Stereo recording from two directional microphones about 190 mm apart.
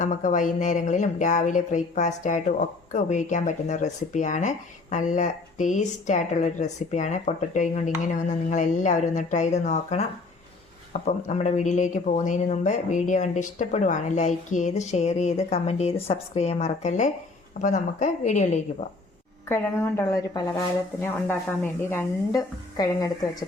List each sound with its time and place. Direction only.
0.0 s speech: 40° left (ahead or behind)
19.5 s a woman's voice: 15° left (ahead or behind)